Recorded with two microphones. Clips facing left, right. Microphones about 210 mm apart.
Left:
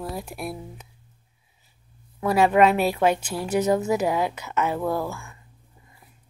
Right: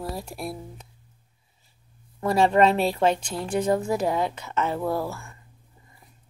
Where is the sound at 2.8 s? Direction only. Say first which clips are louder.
Left 1 dB; 5° left (ahead or behind).